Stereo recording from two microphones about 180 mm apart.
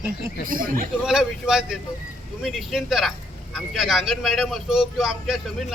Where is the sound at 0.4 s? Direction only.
50° right (ahead or behind).